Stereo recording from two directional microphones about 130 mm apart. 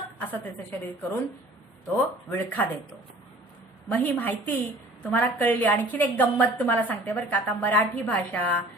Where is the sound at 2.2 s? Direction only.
15° left (ahead or behind).